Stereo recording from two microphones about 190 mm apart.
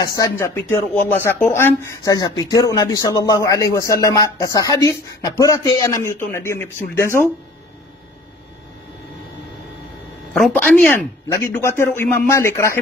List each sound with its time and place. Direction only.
0.0 s speech: 20° left (ahead or behind)
10.3 s speech: 5° left (ahead or behind)